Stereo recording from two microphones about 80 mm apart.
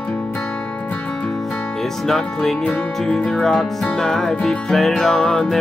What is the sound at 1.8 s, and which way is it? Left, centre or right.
Speech, centre.